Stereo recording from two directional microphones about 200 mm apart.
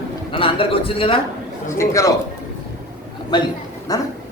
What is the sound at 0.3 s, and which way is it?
Speech, 25° left (ahead or behind).